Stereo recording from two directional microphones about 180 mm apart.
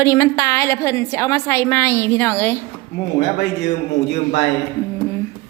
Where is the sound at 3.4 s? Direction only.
70° left (ahead or behind).